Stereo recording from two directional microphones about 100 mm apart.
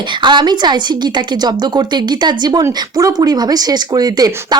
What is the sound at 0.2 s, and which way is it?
Speech, 50° right (ahead or behind).